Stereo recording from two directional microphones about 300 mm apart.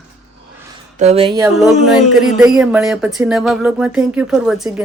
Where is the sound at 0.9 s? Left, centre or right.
Right.